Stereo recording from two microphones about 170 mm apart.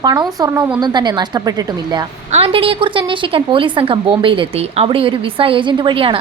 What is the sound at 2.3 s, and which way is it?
A woman's voice, 35° right (ahead or behind).